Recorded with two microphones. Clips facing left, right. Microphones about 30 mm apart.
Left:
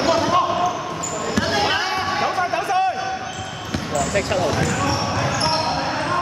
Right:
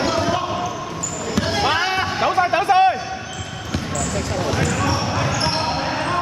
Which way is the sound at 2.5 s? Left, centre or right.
Right.